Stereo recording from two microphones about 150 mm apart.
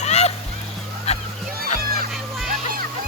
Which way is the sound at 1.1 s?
45° left (ahead or behind).